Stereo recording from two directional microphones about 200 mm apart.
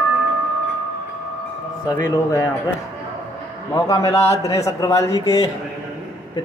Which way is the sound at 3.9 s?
15° left (ahead or behind).